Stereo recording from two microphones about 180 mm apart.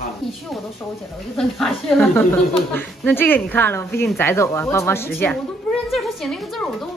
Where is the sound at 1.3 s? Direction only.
Centre (ahead or behind).